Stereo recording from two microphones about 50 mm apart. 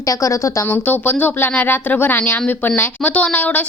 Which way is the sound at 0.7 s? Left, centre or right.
Left.